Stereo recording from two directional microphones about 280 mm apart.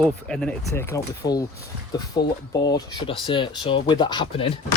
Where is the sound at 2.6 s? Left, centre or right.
Centre.